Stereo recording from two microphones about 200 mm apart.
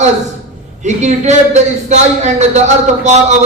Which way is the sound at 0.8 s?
35° right (ahead or behind).